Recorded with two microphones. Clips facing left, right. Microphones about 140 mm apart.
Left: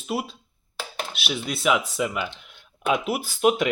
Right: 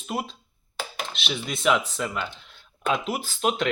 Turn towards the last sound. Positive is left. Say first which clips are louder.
# left 5 dB
turn(degrees=10)  # may be behind; listen again after turning